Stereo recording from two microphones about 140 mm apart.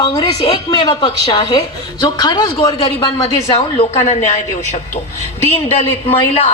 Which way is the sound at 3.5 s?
50° left (ahead or behind).